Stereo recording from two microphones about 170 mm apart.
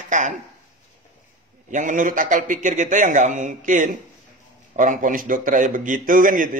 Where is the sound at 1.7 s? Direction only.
50° right (ahead or behind).